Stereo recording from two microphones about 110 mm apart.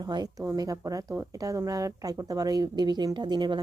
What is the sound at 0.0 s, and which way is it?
Speech, 40° right (ahead or behind).